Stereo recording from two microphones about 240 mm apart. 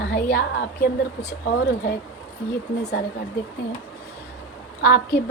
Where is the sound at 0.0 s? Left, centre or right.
Left.